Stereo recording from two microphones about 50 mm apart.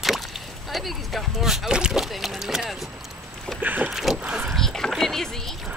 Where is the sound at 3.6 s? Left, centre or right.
Right.